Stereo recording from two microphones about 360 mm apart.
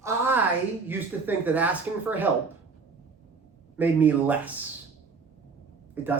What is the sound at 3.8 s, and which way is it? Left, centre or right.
Speech, centre.